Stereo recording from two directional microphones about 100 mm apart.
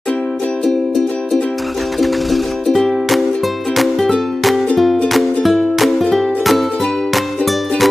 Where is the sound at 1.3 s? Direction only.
Centre (ahead or behind).